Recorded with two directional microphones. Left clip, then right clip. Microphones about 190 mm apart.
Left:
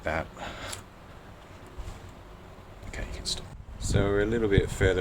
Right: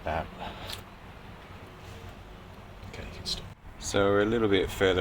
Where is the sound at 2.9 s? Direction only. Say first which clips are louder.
Left 1 dB; 30° left (ahead or behind).